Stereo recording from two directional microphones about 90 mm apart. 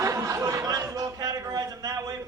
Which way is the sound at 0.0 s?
35° right (ahead or behind).